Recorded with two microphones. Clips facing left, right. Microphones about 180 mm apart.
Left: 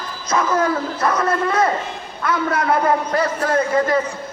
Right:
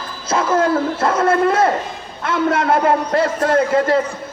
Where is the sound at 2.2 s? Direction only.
25° right (ahead or behind).